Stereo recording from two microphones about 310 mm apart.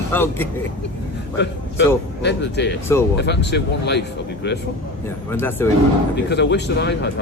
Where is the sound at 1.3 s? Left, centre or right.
Left.